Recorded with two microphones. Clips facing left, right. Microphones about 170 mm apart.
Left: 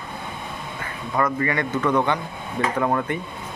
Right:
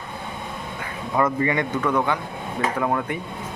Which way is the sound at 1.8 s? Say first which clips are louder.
Left 1 dB; 5° right (ahead or behind).